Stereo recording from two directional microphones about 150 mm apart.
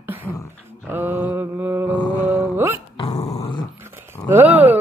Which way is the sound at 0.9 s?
15° right (ahead or behind).